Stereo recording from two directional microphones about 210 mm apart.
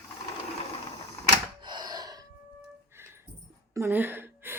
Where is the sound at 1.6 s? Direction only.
20° right (ahead or behind).